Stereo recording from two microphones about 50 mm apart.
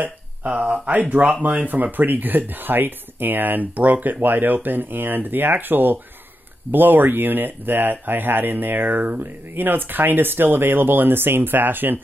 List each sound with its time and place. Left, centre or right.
0.0 s speech: right